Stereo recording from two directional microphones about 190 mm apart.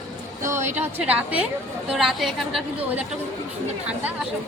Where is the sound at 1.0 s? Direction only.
5° right (ahead or behind).